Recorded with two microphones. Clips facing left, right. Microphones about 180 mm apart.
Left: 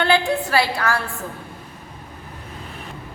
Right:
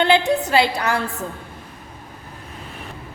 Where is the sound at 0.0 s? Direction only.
20° right (ahead or behind).